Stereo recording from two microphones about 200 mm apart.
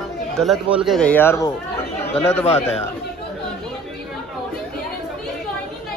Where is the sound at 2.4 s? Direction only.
30° left (ahead or behind).